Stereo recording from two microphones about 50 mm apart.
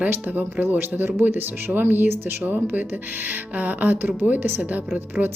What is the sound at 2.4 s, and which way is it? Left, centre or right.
A woman's voice, right.